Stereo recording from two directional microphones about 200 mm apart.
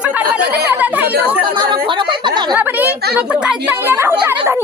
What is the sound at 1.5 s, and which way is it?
A woman's voice, 20° right (ahead or behind).